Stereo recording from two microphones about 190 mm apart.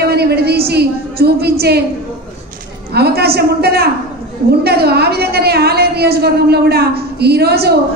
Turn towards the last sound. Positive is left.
turn(degrees=-55)  # may be behind; listen again after turning